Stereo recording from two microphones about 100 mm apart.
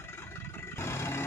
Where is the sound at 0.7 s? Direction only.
25° left (ahead or behind).